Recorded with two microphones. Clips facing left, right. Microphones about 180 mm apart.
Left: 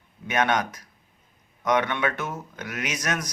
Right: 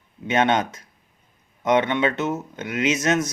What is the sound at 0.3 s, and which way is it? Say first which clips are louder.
Speech: right 4 dB; 25° right (ahead or behind).